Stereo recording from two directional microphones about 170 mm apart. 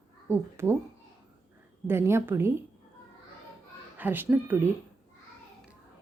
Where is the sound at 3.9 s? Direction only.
10° right (ahead or behind).